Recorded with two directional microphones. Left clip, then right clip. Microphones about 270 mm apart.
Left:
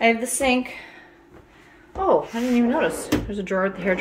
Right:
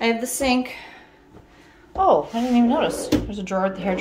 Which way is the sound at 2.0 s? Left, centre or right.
Centre.